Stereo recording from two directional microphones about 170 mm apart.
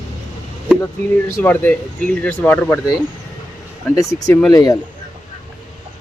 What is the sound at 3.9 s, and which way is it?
Speech, 20° left (ahead or behind).